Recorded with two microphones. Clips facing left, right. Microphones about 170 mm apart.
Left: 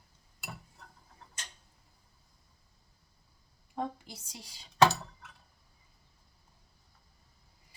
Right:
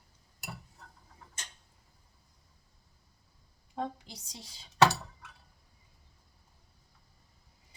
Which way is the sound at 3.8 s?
20° right (ahead or behind).